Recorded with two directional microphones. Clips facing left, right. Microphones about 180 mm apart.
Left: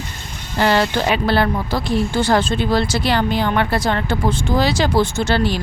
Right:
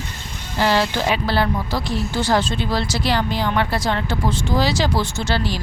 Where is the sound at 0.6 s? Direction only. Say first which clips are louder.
Left 2 dB; 55° left (ahead or behind).